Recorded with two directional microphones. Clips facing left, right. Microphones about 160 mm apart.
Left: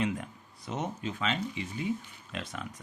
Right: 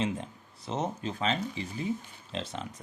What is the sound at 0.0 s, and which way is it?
Speech, 25° right (ahead or behind).